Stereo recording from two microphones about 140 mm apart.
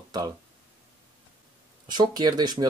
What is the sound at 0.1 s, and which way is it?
Speech, 30° right (ahead or behind).